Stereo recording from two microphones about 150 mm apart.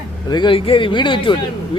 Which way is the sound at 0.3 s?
30° left (ahead or behind).